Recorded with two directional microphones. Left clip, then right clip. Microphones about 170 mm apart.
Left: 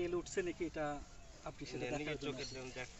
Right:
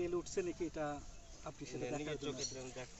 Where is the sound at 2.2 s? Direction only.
10° right (ahead or behind).